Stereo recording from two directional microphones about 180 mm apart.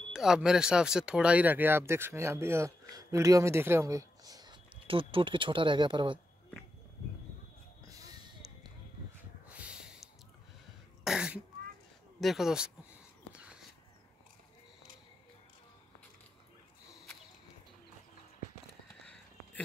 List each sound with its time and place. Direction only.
0.1 s speech: 5° right (ahead or behind); by 6.1 s 25° right (ahead or behind)
7.8 s a sound: 20° right (ahead or behind)
9.5 s snort: 5° right (ahead or behind)
11.1 s throat clearing: 5° right (ahead or behind)
12.2 s speech: centre (ahead or behind)